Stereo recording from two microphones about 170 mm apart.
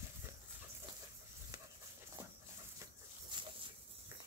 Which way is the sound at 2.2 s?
15° right (ahead or behind).